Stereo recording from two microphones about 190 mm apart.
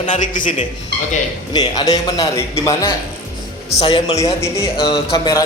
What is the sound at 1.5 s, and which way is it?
A man's voice, 20° left (ahead or behind).